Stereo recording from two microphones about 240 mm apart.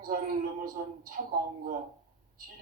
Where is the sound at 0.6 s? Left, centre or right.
Right.